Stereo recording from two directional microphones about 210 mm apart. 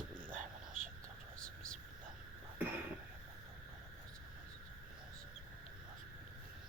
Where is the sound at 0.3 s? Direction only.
40° right (ahead or behind).